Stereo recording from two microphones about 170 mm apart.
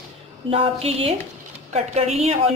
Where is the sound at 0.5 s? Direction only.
35° right (ahead or behind).